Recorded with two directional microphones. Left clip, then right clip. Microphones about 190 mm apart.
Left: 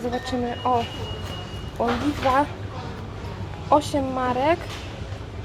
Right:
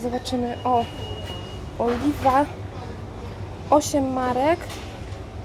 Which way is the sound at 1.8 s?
10° right (ahead or behind).